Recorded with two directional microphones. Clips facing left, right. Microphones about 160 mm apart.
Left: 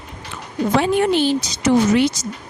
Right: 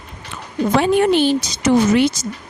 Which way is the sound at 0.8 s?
60° right (ahead or behind).